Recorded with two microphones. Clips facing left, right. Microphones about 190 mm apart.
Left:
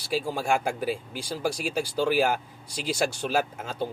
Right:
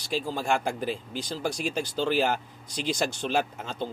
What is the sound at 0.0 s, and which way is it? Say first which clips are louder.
Speech: left 2 dB; 10° left (ahead or behind).